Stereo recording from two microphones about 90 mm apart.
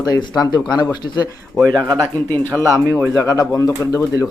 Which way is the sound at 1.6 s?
45° right (ahead or behind).